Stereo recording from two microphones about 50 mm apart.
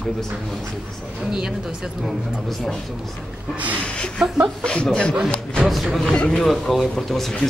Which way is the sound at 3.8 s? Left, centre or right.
Left.